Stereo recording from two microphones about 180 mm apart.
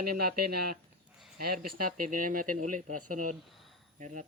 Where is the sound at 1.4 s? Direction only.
55° right (ahead or behind).